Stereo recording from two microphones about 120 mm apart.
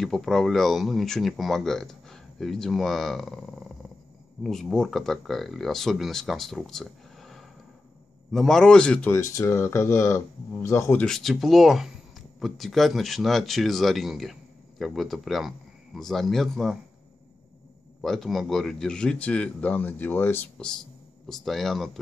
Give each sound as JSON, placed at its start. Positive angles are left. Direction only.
{"t": 0.0, "sound": "speech", "side_deg": 0}
{"t": 9.1, "sound": "speech", "side_deg": 20}
{"t": 11.0, "sound": "speech", "side_deg": 5}
{"t": 18.0, "sound": "a man's voice", "side_deg": 0}